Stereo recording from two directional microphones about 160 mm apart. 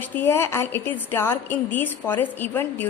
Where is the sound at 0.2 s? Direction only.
15° left (ahead or behind).